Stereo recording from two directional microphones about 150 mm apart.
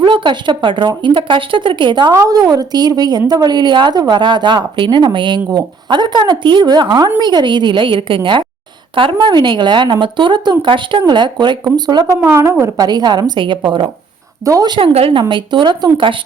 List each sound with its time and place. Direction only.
0.0 s speech: 30° right (ahead or behind)
14.9 s speech: 40° right (ahead or behind)